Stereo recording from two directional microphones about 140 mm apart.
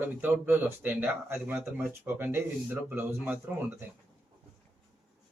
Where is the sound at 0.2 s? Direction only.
15° right (ahead or behind).